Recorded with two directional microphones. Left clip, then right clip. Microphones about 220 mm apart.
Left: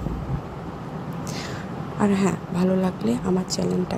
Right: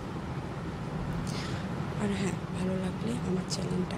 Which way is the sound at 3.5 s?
30° left (ahead or behind).